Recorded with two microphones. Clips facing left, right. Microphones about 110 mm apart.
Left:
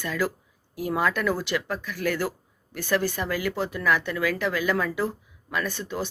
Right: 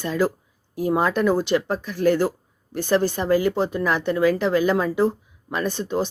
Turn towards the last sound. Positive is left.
turn(degrees=-25)  # may be behind; listen again after turning